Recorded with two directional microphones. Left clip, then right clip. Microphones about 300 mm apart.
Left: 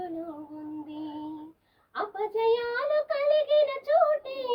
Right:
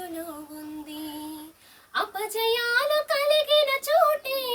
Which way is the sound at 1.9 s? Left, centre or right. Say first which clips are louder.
Right 2 dB; centre.